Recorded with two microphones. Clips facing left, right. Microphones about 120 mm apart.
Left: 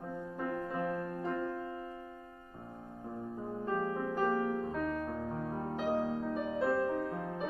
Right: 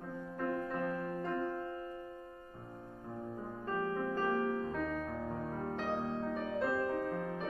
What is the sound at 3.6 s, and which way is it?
Music, 10° left (ahead or behind).